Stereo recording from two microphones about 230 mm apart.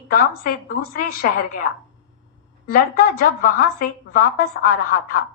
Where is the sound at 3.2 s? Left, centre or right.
Left.